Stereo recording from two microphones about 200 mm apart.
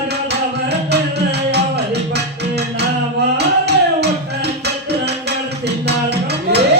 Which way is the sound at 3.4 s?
55° right (ahead or behind).